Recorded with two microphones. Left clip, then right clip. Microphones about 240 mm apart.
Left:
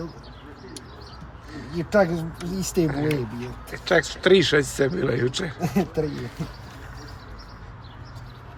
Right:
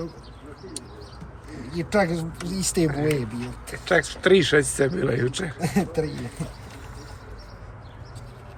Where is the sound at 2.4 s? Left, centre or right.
Centre.